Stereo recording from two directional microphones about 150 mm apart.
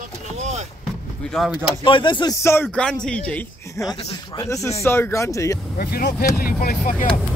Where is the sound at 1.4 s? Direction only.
Centre (ahead or behind).